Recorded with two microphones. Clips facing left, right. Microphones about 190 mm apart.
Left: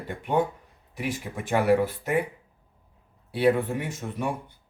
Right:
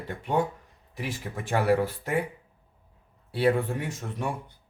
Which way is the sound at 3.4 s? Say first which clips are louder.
Left 2 dB; 15° left (ahead or behind).